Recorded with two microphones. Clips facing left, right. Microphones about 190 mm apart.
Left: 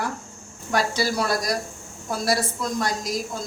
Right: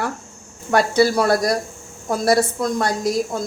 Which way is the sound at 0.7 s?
55° right (ahead or behind).